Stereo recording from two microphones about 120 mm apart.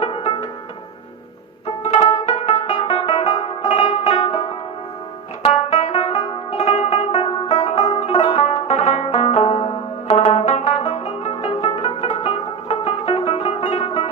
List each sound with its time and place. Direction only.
0.0 s music: 60° left (ahead or behind)
1.6 s music: 60° left (ahead or behind)
5.4 s music: 60° left (ahead or behind)
7.4 s banjo: 60° left (ahead or behind)
11.4 s music: 50° left (ahead or behind)